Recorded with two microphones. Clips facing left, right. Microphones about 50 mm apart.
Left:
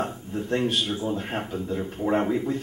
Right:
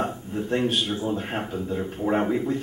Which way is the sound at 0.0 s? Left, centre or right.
Centre.